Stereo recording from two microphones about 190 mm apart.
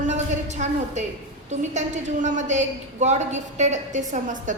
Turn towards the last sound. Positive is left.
turn(degrees=-40)  # may be behind; listen again after turning